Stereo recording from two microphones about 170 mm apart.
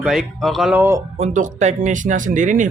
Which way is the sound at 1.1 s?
40° right (ahead or behind).